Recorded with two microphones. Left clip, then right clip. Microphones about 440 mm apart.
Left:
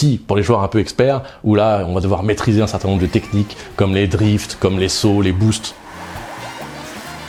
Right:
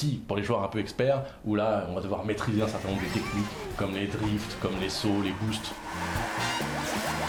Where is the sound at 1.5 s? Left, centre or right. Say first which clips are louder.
Left 13 dB; left.